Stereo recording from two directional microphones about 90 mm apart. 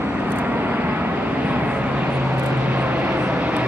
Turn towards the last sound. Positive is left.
turn(degrees=-15)  # may be behind; listen again after turning